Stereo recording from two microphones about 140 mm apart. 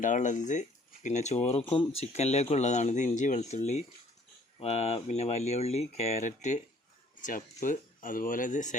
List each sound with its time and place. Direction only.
0.0 s speech: 65° left (ahead or behind)